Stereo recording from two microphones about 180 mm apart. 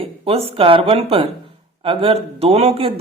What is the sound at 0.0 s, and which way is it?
A man's voice, 30° right (ahead or behind).